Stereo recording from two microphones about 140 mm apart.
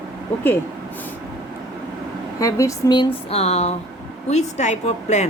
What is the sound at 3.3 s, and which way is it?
A woman's voice, 50° left (ahead or behind).